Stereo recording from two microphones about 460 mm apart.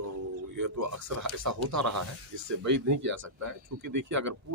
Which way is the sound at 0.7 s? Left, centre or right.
Right.